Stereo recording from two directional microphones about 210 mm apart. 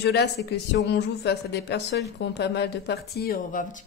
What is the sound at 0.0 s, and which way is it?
Speech, 50° left (ahead or behind).